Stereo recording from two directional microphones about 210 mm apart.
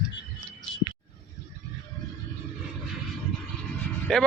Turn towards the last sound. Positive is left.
turn(degrees=5)  # may be behind; listen again after turning